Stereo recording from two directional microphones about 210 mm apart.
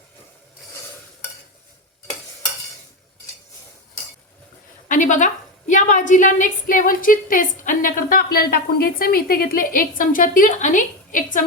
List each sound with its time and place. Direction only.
4.9 s a woman's voice: 35° left (ahead or behind)